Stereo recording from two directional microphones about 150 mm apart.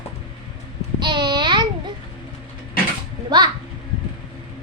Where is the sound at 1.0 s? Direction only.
30° right (ahead or behind).